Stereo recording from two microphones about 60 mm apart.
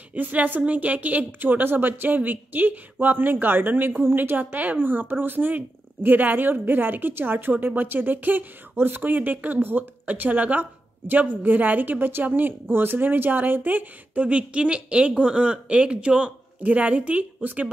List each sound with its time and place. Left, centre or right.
0.1 s a woman's voice: right